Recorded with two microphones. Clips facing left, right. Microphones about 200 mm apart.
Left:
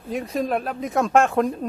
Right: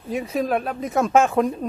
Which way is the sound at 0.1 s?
Centre (ahead or behind).